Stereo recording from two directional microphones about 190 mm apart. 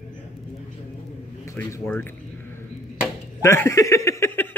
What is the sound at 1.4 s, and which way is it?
Speech, 15° left (ahead or behind).